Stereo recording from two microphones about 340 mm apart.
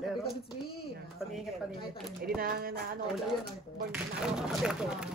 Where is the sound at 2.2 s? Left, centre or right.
Right.